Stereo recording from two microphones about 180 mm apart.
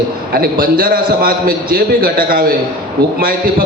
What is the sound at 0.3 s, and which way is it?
A man's voice, 55° right (ahead or behind).